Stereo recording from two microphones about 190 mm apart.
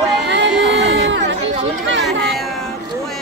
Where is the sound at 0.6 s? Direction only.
70° right (ahead or behind).